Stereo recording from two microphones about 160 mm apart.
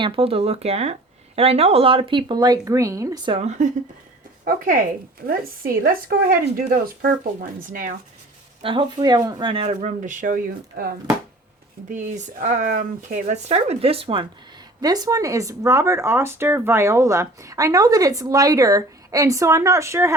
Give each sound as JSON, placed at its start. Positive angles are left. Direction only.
{"t": 0.0, "sound": "speech", "side_deg": -35}
{"t": 3.3, "sound": "speech", "side_deg": -45}
{"t": 4.4, "sound": "speech", "side_deg": -60}
{"t": 7.6, "sound": "speech", "side_deg": -55}
{"t": 8.6, "sound": "speech", "side_deg": -30}
{"t": 9.6, "sound": "speech", "side_deg": -50}
{"t": 11.9, "sound": "speech", "side_deg": -50}
{"t": 14.8, "sound": "speech", "side_deg": -25}